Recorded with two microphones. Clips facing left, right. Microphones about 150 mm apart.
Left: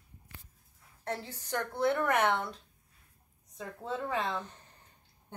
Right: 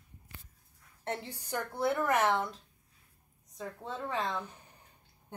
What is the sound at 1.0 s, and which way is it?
Speech, 20° right (ahead or behind).